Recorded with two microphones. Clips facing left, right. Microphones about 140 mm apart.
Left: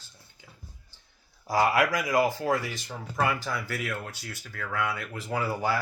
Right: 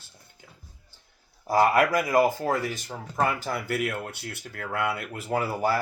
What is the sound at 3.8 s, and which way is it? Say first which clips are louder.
Speech: right 4 dB; 30° right (ahead or behind).